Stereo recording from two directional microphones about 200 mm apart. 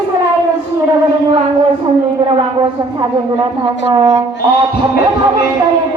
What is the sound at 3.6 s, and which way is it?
Speech, 20° right (ahead or behind).